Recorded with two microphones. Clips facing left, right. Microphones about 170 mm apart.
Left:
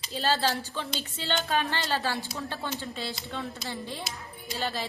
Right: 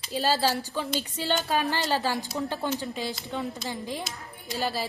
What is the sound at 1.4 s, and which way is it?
Speech, centre (ahead or behind).